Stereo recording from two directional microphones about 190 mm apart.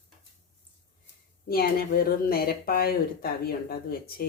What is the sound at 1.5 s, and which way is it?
Speech, 50° left (ahead or behind).